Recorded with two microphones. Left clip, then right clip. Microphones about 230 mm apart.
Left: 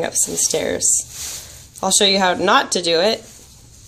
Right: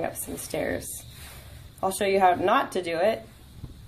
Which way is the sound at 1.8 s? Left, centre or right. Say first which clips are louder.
Left 6 dB; left.